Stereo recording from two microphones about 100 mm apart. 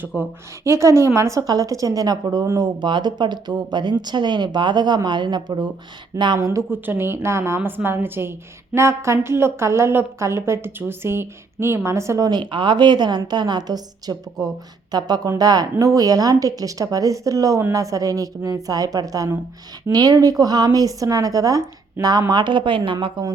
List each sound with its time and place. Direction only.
0.2 s a woman's voice: 25° right (ahead or behind); by 6.4 s 50° right (ahead or behind)
6.4 s a woman's voice: 30° right (ahead or behind)
12.3 s a woman's voice: 50° right (ahead or behind)
22.3 s a woman's voice: 50° right (ahead or behind)